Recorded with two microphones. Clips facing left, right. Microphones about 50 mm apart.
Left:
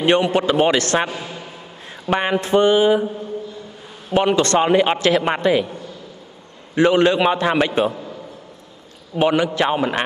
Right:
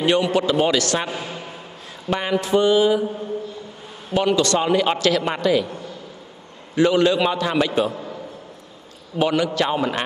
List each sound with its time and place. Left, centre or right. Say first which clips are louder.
0.0 s a man's voice: left 2 dB; left
2.0 s a man's voice: left 3 dB; left
4.1 s a man's voice: left 2 dB; left
6.7 s speech: left 2 dB; left
9.1 s speech: left 3 dB; left